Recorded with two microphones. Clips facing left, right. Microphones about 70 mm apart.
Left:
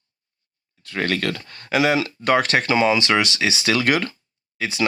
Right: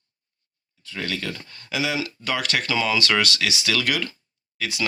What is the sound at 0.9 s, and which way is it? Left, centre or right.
Speech, left.